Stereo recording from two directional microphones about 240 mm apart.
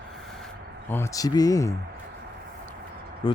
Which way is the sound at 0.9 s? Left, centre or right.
Centre.